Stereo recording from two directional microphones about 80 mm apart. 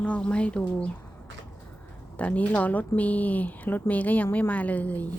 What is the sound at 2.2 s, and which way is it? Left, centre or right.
Speech, centre.